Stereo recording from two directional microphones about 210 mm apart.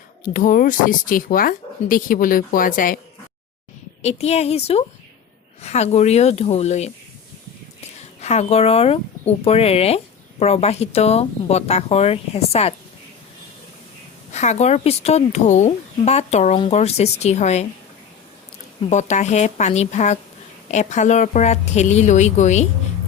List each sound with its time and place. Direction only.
0.3 s a woman's voice: 40° left (ahead or behind)
4.0 s a woman's voice: 30° left (ahead or behind)
8.2 s speech: 30° left (ahead or behind)
14.3 s a woman's voice: 30° left (ahead or behind)
18.8 s a woman's voice: 35° left (ahead or behind)